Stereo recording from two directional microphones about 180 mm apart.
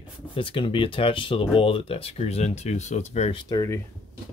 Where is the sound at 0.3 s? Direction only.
30° left (ahead or behind).